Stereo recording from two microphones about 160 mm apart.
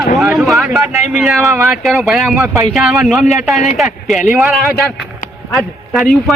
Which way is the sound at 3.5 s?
45° left (ahead or behind).